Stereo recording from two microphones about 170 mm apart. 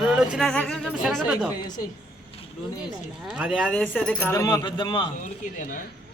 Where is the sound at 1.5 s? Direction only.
25° left (ahead or behind).